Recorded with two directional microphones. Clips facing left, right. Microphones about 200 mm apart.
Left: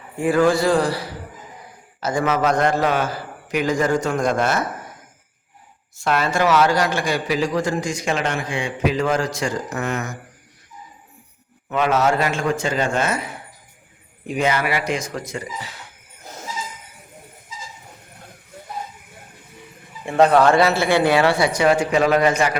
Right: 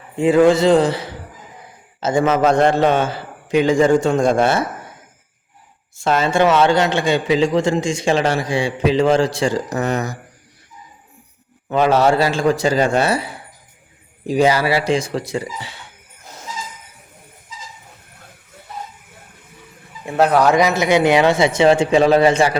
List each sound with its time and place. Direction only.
0.2 s a man's voice: 20° right (ahead or behind)
6.0 s a man's voice: 25° right (ahead or behind)
11.7 s a man's voice: 30° right (ahead or behind)
20.1 s speech: 5° right (ahead or behind)
20.6 s a man's voice: 15° right (ahead or behind)